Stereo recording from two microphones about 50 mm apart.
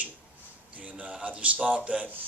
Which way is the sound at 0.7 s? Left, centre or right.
Right.